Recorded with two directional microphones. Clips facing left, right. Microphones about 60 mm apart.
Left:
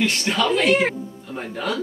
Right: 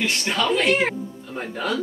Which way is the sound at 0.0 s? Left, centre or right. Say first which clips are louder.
Left 2 dB; centre.